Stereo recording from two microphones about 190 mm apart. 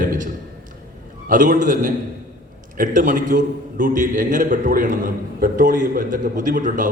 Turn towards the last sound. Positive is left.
turn(degrees=-45)  # may be behind; listen again after turning